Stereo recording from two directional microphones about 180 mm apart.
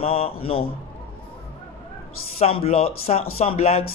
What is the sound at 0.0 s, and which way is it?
Speech, 35° left (ahead or behind).